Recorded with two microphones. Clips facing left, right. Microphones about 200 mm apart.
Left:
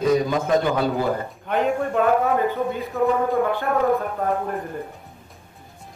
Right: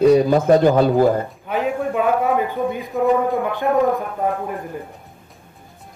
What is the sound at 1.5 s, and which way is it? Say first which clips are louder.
A man's voice: even; 5° right (ahead or behind).